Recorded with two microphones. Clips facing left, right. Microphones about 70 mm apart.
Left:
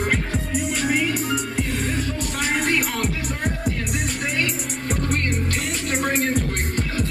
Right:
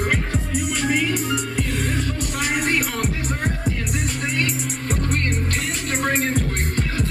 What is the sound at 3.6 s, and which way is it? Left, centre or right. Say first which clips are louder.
Music: even; right.